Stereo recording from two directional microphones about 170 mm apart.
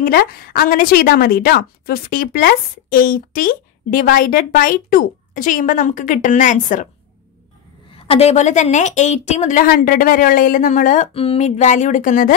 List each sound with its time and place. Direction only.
0.0 s a woman's voice: 55° left (ahead or behind)
7.9 s a woman's voice: 35° left (ahead or behind)